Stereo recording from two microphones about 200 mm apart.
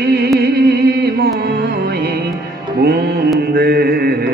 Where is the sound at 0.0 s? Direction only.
50° right (ahead or behind).